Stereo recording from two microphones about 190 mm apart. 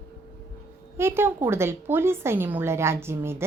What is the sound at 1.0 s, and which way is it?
A woman's voice, 10° right (ahead or behind).